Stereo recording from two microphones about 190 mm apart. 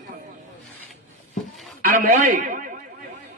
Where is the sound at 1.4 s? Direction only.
Centre (ahead or behind).